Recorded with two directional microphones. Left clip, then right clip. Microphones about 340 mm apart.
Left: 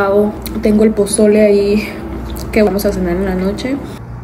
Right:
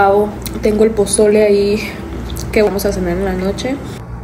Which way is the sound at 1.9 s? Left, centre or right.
Centre.